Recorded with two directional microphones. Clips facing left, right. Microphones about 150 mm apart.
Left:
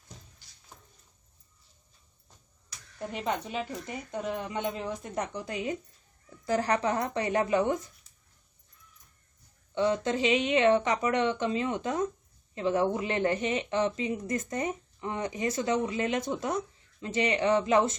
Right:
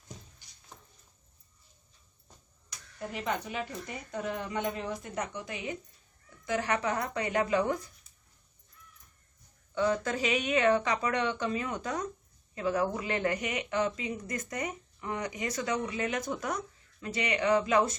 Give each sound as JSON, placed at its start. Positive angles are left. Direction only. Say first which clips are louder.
{"t": 3.2, "sound": "speech", "louder": "left 2 dB", "side_deg": 25}
{"t": 5.1, "sound": "speech", "louder": "left 3 dB", "side_deg": 35}
{"t": 9.7, "sound": "speech", "louder": "left 2 dB", "side_deg": 25}